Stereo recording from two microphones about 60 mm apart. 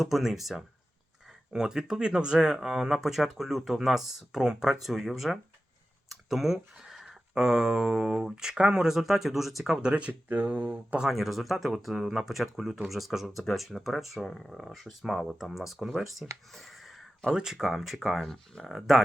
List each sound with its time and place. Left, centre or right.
0.0 s speech: centre
9.9 s speech: right
11.0 s speech: centre
16.5 s a sound: centre
17.3 s speech: centre
18.2 s speech: centre
18.7 s speech: centre